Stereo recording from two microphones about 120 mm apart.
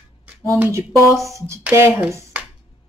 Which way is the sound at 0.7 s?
25° right (ahead or behind).